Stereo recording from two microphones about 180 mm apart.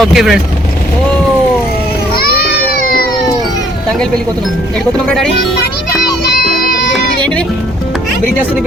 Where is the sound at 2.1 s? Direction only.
60° left (ahead or behind).